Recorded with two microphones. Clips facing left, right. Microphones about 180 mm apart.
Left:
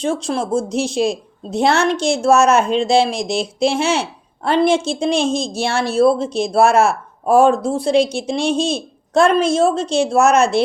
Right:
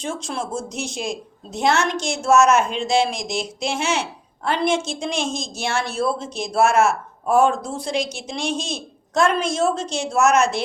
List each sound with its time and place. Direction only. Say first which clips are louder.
0.0 s a woman's voice: left 7 dB; 30° left (ahead or behind)
7.4 s speech: left 6 dB; 55° left (ahead or behind)
8.1 s a woman's voice: left 8 dB; 30° left (ahead or behind)